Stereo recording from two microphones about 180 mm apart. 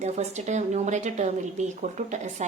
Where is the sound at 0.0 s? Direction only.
40° right (ahead or behind).